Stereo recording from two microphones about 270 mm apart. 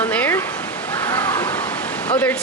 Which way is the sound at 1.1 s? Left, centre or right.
Centre.